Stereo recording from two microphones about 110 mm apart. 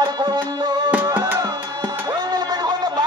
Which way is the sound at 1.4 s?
40° right (ahead or behind).